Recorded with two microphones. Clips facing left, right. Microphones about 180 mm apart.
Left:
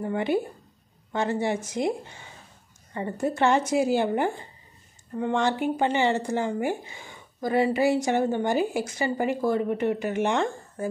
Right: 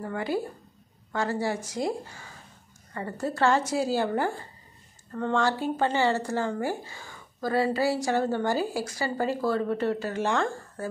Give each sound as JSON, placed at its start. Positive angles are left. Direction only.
{"t": 0.0, "sound": "speech", "side_deg": 20}